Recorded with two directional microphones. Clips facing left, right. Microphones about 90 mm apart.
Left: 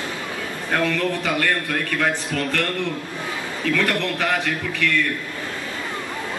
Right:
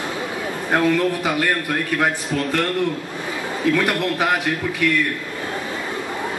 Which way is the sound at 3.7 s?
15° right (ahead or behind).